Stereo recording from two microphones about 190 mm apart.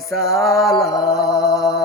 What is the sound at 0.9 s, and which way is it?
Music, 15° left (ahead or behind).